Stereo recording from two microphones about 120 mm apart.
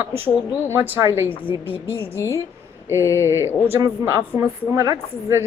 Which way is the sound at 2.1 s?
25° left (ahead or behind).